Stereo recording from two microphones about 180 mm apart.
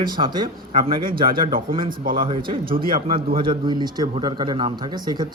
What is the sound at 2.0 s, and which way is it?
Speech, 50° right (ahead or behind).